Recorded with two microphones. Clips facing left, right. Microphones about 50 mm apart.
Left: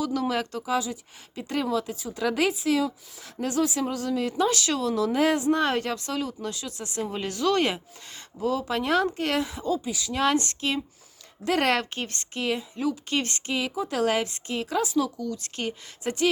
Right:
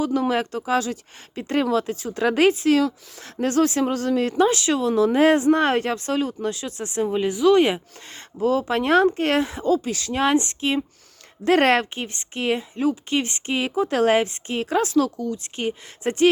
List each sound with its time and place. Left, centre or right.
0.0 s speech: right
4.4 s speech: right
7.0 s speech: centre
8.1 s speech: right
10.2 s speech: right
11.4 s speech: right
11.9 s speech: right
13.1 s speech: right
13.6 s speech: right
15.2 s speech: right
16.0 s speech: right